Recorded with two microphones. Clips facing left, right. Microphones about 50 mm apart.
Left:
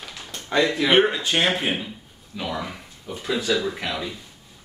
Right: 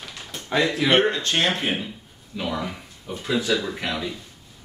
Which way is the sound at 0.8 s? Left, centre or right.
Centre.